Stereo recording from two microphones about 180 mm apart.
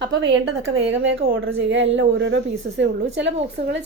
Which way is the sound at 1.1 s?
65° right (ahead or behind).